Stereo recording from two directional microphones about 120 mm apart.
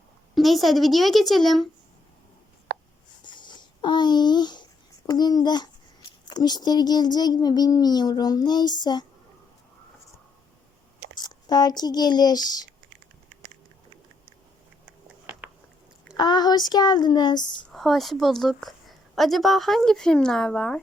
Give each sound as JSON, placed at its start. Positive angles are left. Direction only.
{"t": 0.3, "sound": "a woman's voice", "side_deg": 0}
{"t": 3.3, "sound": "a sound", "side_deg": 40}
{"t": 5.0, "sound": "a child's voice", "side_deg": 35}
{"t": 11.2, "sound": "speech", "side_deg": 35}
{"t": 16.1, "sound": "a child's voice", "side_deg": 35}
{"t": 17.7, "sound": "a woman's voice", "side_deg": 0}